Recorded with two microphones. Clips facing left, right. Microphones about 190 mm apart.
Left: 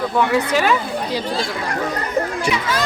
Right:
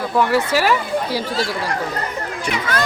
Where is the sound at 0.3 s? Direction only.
5° right (ahead or behind).